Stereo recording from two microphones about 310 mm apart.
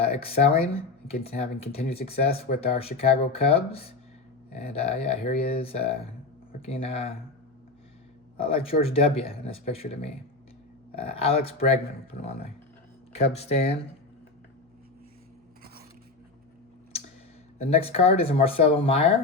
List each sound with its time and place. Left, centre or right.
0.0 s speech: centre
8.4 s speech: centre
17.6 s speech: centre